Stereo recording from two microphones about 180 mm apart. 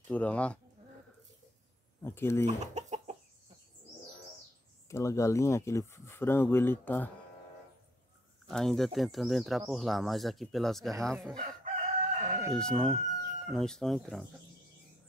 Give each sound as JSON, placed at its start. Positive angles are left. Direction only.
{"t": 0.1, "sound": "speech", "side_deg": 5}
{"t": 2.0, "sound": "speech", "side_deg": 15}
{"t": 2.4, "sound": "chicken", "side_deg": -40}
{"t": 4.8, "sound": "speech", "side_deg": 15}
{"t": 8.5, "sound": "speech", "side_deg": 0}
{"t": 11.3, "sound": "chicken", "side_deg": -45}
{"t": 12.5, "sound": "speech", "side_deg": 5}